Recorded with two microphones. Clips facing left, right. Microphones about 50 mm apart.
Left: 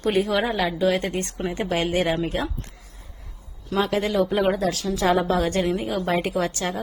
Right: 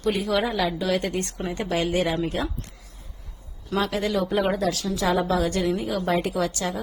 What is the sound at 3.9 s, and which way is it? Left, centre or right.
A woman's voice, left.